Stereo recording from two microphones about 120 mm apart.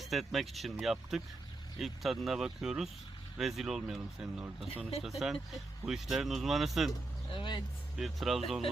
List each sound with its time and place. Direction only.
0.0 s speech: centre (ahead or behind)
7.3 s speech: 40° left (ahead or behind)
7.9 s speech: centre (ahead or behind)